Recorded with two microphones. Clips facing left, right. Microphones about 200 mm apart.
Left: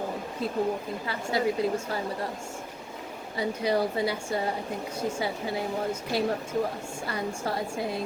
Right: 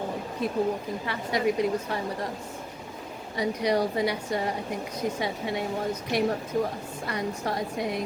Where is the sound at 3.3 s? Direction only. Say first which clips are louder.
Right 1 dB; 30° left (ahead or behind).